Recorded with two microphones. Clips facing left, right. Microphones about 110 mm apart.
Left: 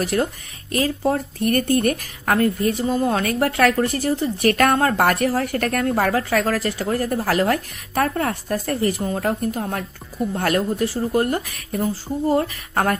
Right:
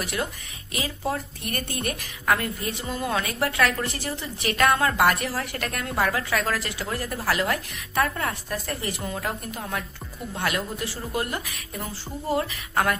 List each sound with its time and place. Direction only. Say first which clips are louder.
0.0 s a woman's voice: left 8 dB; 40° left (ahead or behind)
8.3 s speech: left 7 dB; 50° left (ahead or behind)